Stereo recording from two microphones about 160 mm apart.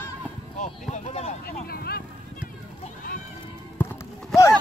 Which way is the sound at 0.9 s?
45° left (ahead or behind).